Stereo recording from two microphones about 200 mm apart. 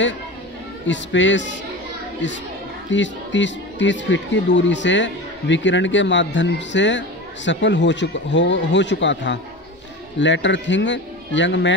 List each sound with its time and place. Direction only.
0.8 s speech: 65° left (ahead or behind)
2.9 s speech: 65° left (ahead or behind)